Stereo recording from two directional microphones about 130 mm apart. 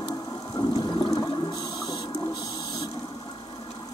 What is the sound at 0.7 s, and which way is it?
Toilet flush, 30° left (ahead or behind).